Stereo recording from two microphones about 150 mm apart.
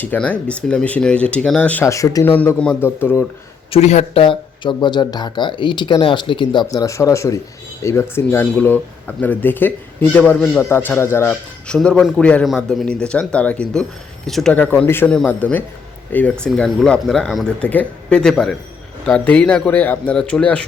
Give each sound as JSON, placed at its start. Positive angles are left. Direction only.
{"t": 0.0, "sound": "a man's voice", "side_deg": 10}
{"t": 1.8, "sound": "a man's voice", "side_deg": 20}
{"t": 3.7, "sound": "a man's voice", "side_deg": 45}